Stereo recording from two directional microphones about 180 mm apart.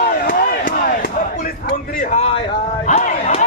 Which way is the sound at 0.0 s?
55° left (ahead or behind).